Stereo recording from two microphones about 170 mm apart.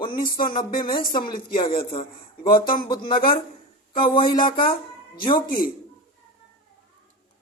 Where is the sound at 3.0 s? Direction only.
30° left (ahead or behind).